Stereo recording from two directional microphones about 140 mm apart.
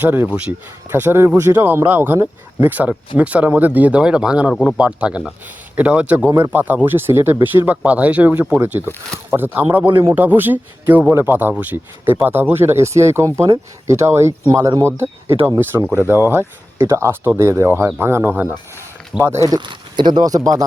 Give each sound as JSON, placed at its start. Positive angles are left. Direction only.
{"t": 0.0, "sound": "speech", "side_deg": -15}
{"t": 19.4, "sound": "speech", "side_deg": -30}